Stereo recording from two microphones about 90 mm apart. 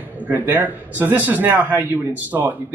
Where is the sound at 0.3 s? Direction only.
20° right (ahead or behind).